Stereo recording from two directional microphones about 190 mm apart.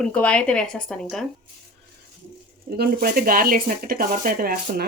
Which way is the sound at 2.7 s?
55° right (ahead or behind).